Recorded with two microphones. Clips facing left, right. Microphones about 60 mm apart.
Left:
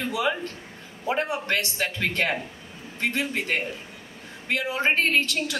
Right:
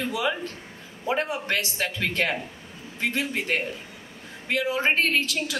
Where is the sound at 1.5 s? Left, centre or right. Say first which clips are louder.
Left 1 dB; centre.